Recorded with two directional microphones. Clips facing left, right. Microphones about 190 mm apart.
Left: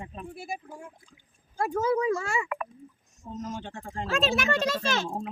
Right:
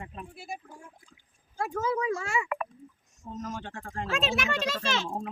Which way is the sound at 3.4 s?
25° left (ahead or behind).